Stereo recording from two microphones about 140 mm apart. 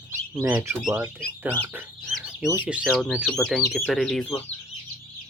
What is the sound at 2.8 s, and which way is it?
Speech, 5° left (ahead or behind).